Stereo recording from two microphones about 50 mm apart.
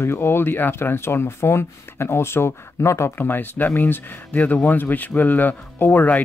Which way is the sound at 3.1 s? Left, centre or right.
Left.